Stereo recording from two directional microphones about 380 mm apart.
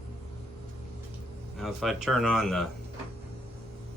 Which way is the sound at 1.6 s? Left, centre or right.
Centre.